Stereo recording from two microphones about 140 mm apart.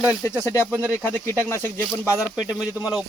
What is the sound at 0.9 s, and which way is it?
Speech, 15° left (ahead or behind).